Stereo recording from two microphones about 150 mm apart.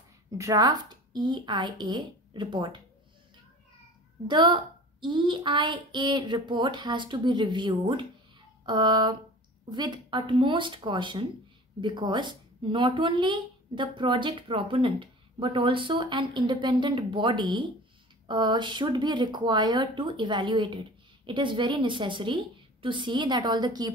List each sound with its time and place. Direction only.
0.4 s a woman's voice: 25° right (ahead or behind)
4.3 s a woman's voice: 30° right (ahead or behind)